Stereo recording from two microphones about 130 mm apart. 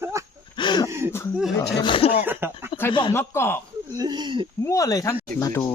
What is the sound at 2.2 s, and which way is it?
Speech, 15° right (ahead or behind).